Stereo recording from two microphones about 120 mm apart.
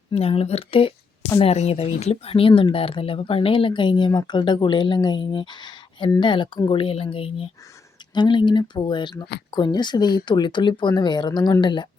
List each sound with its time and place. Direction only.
0.1 s speech: 55° left (ahead or behind)
8.1 s speech: 40° left (ahead or behind)